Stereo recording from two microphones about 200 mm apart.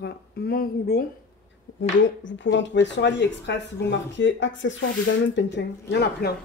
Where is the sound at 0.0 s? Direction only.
50° left (ahead or behind).